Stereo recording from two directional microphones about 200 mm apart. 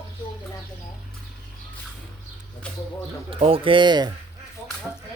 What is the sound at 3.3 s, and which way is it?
Speech, 30° right (ahead or behind).